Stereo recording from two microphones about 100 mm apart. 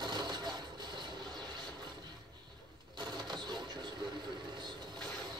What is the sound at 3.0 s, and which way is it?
Vehicle, 45° right (ahead or behind).